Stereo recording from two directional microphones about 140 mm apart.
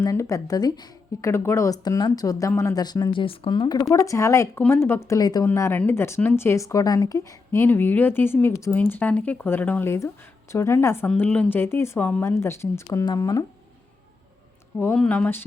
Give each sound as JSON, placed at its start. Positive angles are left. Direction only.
{"t": 0.0, "sound": "a woman's voice", "side_deg": 25}
{"t": 14.9, "sound": "speech", "side_deg": 10}